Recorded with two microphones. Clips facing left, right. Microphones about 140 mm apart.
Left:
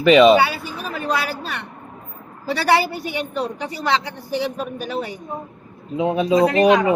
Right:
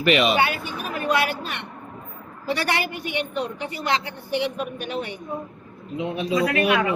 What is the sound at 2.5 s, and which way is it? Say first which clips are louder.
A woman's voice: left 6 dB; 35° left (ahead or behind).